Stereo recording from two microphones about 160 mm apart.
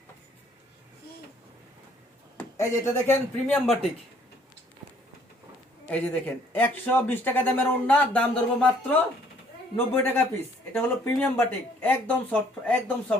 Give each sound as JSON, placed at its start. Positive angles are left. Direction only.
{"t": 2.4, "sound": "speech", "side_deg": 15}
{"t": 5.9, "sound": "speech", "side_deg": 10}